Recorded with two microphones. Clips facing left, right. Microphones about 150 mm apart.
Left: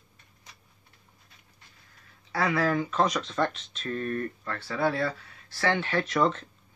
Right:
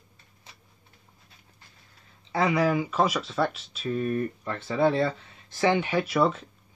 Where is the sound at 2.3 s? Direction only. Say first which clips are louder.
Right 2 dB; 20° right (ahead or behind).